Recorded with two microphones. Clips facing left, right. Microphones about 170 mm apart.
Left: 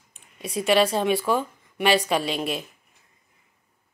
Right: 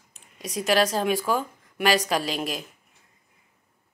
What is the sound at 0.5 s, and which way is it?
Speech, centre (ahead or behind).